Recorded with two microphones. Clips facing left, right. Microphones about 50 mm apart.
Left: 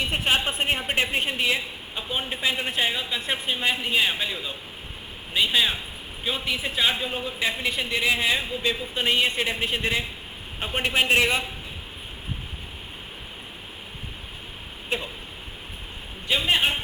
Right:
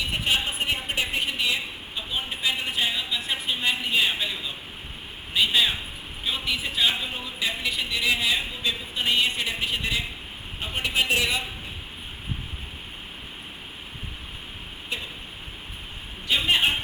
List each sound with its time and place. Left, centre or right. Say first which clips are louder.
0.1 s a man's voice: left 2 dB; left; by 4.3 s centre
5.3 s a man's voice: even; centre; by 11.3 s left
16.3 s a man's voice: even; centre